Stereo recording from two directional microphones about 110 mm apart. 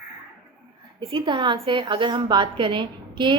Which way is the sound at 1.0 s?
45° right (ahead or behind).